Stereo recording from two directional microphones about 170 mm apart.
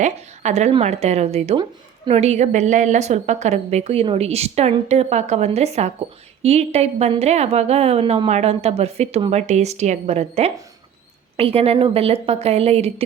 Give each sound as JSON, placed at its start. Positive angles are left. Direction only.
{"t": 0.0, "sound": "a woman's voice", "side_deg": -40}